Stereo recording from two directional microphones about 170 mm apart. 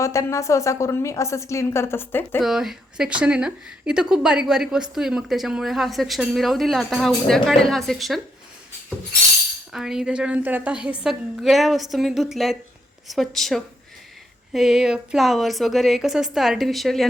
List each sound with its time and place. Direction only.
0.0 s a woman's voice: 15° left (ahead or behind)
2.4 s a woman's voice: centre (ahead or behind)
9.7 s a woman's voice: 5° right (ahead or behind)